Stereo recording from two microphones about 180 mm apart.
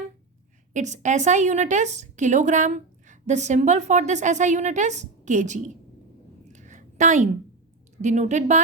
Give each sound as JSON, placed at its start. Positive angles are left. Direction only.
{"t": 0.7, "sound": "a woman's voice", "side_deg": -40}
{"t": 6.5, "sound": "a sound", "side_deg": -45}
{"t": 8.0, "sound": "a woman's voice", "side_deg": -40}